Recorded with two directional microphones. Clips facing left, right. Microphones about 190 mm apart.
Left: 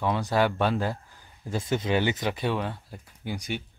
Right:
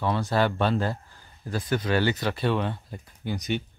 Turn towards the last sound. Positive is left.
turn(degrees=10)  # may be behind; listen again after turning